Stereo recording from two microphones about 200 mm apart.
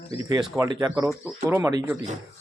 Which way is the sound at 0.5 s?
20° right (ahead or behind).